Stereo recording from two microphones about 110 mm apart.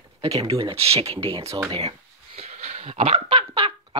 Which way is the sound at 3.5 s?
55° right (ahead or behind).